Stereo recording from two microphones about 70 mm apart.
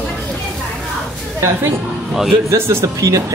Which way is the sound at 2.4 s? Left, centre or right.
Right.